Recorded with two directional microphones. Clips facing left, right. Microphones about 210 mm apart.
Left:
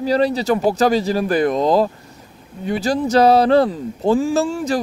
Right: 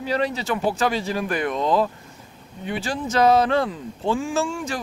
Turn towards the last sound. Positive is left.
turn(degrees=35)  # may be behind; listen again after turning